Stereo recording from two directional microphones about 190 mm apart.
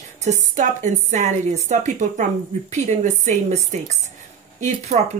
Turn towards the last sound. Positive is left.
turn(degrees=-35)  # may be behind; listen again after turning